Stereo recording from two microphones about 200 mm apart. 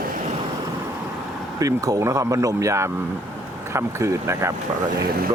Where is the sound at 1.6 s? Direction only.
15° right (ahead or behind).